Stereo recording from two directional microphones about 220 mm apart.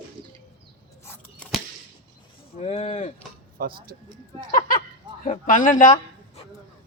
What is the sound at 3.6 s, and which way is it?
Speech, 40° right (ahead or behind).